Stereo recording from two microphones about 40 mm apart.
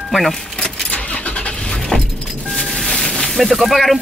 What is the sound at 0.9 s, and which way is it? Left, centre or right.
Vehicle, left.